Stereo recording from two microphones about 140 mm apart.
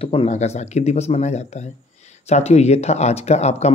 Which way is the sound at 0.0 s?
45° left (ahead or behind).